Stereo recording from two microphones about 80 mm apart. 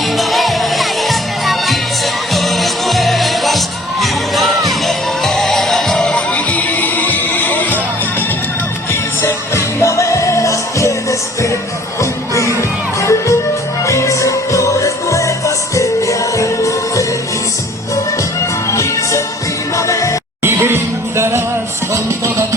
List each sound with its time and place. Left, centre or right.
0.2 s music: centre
6.3 s music: centre
9.2 s music: left
18.7 s music: left
20.4 s music: right